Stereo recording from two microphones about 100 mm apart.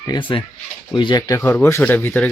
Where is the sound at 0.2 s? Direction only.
55° left (ahead or behind).